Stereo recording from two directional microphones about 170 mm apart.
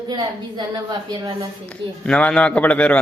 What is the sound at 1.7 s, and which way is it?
A man's voice, 5° left (ahead or behind).